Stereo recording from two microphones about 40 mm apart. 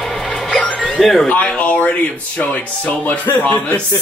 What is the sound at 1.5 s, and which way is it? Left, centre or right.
Speech, left.